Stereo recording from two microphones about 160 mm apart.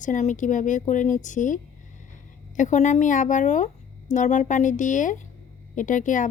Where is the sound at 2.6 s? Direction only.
50° left (ahead or behind).